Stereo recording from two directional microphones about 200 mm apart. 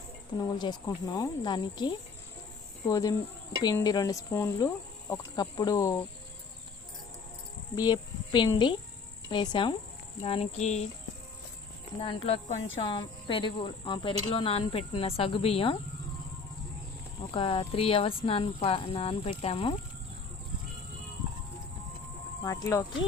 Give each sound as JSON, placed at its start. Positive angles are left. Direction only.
{"t": 0.3, "sound": "speech", "side_deg": 20}
{"t": 7.8, "sound": "speech", "side_deg": 20}
{"t": 10.2, "sound": "cricket", "side_deg": 30}
{"t": 11.9, "sound": "speech", "side_deg": 30}
{"t": 17.3, "sound": "speech", "side_deg": 25}
{"t": 22.4, "sound": "speech", "side_deg": 15}